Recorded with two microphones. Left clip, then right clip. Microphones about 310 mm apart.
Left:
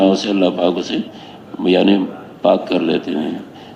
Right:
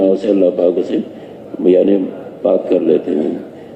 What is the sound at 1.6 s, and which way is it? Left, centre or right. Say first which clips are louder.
Speech: right 3 dB; left.